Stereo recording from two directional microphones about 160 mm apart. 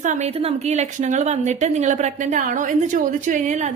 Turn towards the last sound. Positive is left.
turn(degrees=-45)  # may be behind; listen again after turning